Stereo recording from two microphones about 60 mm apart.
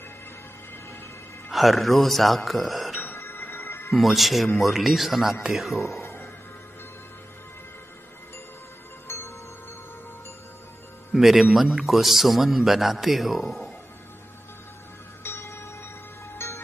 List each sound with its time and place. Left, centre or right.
1.5 s a man's voice: centre
3.2 s music: left
3.9 s a man's voice: centre
5.8 s speech: left
9.0 s music: left
11.1 s a man's voice: centre
11.7 s a man's voice: centre
15.2 s music: left